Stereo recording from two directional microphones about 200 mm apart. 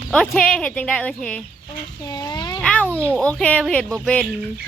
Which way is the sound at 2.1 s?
20° left (ahead or behind).